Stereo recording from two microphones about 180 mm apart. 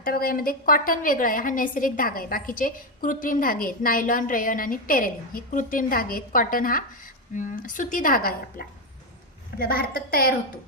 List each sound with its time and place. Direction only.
0.0 s a woman's voice: 55° left (ahead or behind)